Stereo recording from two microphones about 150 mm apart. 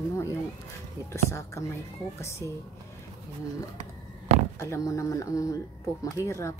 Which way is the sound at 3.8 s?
45° right (ahead or behind).